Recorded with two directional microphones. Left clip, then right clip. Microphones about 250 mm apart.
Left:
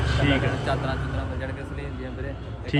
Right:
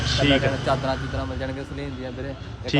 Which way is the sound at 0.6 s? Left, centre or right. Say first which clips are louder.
Right 4 dB; right.